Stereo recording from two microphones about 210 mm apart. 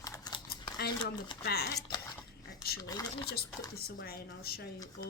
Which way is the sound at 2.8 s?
15° left (ahead or behind).